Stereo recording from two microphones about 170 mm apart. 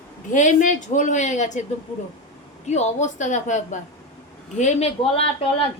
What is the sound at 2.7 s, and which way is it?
A woman's voice, 45° left (ahead or behind).